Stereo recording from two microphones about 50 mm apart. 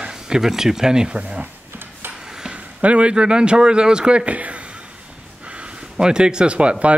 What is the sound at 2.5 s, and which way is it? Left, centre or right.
Speech, right.